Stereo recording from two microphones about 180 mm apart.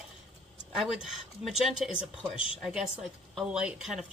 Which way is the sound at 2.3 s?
30° left (ahead or behind).